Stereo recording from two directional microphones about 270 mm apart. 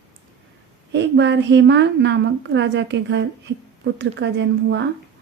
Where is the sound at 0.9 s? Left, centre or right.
Right.